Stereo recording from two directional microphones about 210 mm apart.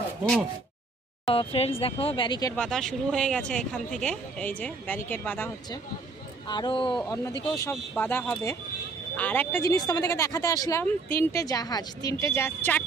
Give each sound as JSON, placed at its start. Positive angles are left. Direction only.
{"t": 1.3, "sound": "speech", "side_deg": 25}
{"t": 2.5, "sound": "speech", "side_deg": 5}
{"t": 6.4, "sound": "speech", "side_deg": 20}